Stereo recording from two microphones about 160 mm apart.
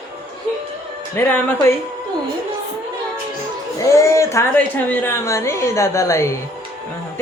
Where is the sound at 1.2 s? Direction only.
15° left (ahead or behind).